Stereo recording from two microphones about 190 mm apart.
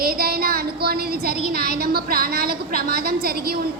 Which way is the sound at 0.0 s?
50° right (ahead or behind).